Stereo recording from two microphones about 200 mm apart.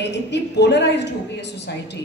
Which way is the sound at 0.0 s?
60° left (ahead or behind).